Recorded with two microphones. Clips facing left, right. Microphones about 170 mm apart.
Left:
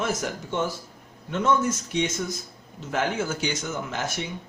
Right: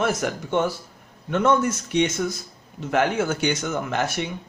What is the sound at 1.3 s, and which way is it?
Speech, 65° right (ahead or behind).